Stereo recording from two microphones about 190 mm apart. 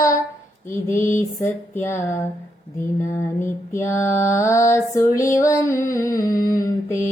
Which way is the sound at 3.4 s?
15° left (ahead or behind).